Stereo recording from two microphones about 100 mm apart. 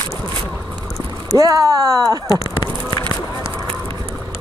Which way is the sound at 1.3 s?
35° right (ahead or behind).